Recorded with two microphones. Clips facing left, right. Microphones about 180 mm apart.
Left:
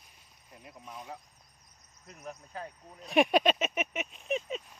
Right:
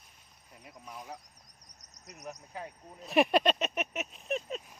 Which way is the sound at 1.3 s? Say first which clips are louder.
Right 2 dB; 80° right.